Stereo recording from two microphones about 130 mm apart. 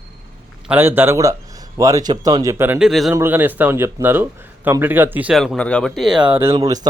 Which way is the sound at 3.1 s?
15° right (ahead or behind).